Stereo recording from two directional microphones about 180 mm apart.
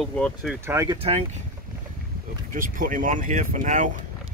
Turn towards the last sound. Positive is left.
turn(degrees=-45)  # may be behind; listen again after turning